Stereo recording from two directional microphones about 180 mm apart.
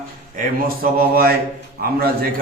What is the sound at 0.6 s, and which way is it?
Mantra, 55° right (ahead or behind).